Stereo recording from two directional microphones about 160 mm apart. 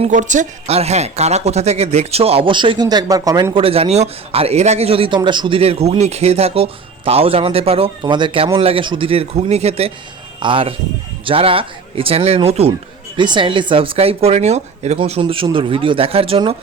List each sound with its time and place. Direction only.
0.0 s speech: 50° right (ahead or behind); by 16.6 s 35° right (ahead or behind)